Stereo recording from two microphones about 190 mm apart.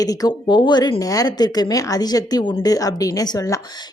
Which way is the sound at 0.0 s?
20° left (ahead or behind).